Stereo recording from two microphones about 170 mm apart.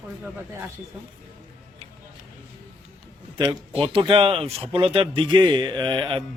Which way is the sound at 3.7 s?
30° right (ahead or behind).